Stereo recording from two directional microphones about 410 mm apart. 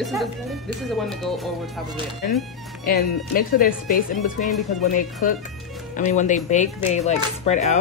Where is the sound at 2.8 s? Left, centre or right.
Left.